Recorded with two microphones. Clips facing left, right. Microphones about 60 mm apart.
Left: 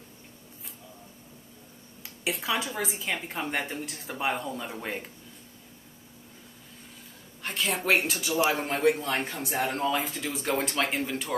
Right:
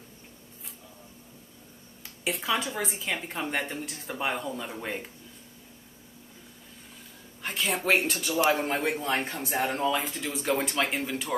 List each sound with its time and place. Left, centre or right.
2.0 s a woman's voice: centre
7.4 s a woman's voice: centre